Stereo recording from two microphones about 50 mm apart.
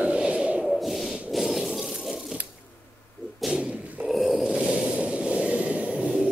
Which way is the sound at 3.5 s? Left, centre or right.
Right.